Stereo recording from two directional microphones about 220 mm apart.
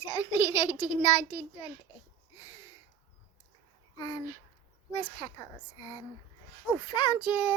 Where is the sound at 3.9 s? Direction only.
20° left (ahead or behind).